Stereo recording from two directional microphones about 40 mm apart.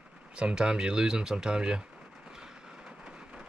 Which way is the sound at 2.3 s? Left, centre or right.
Centre.